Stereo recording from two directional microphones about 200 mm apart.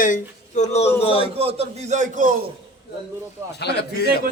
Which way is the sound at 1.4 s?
30° right (ahead or behind).